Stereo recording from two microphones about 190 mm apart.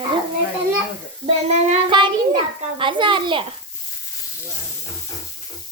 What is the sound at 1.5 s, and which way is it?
Child singing, 35° right (ahead or behind).